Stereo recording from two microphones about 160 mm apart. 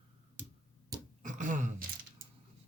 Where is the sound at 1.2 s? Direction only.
50° right (ahead or behind).